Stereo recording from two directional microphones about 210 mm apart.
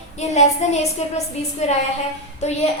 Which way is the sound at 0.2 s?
30° left (ahead or behind).